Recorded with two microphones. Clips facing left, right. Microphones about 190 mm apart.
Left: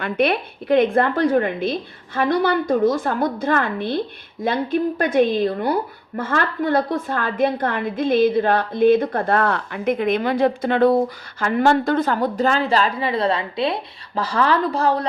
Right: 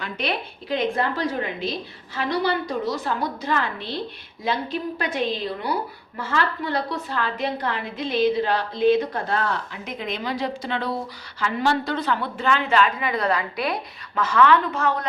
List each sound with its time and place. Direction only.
0.0 s a woman's voice: 55° left (ahead or behind); by 15.0 s 35° left (ahead or behind)